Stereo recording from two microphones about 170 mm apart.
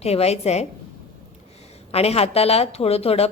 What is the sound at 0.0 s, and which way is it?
Speech, 35° left (ahead or behind).